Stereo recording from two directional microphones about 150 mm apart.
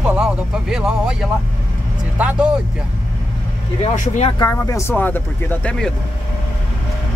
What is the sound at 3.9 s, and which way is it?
Speech, 50° left (ahead or behind).